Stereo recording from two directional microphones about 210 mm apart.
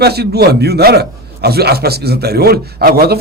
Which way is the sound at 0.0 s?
50° right (ahead or behind).